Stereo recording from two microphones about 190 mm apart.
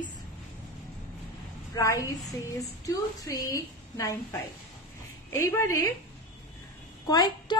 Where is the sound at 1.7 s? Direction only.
15° left (ahead or behind).